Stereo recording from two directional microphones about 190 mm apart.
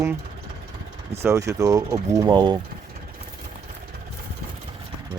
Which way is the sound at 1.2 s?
15° right (ahead or behind).